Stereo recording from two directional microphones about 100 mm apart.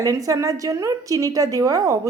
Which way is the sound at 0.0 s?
35° right (ahead or behind).